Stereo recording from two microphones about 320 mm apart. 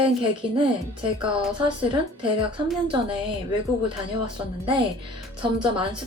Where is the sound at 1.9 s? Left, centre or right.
Centre.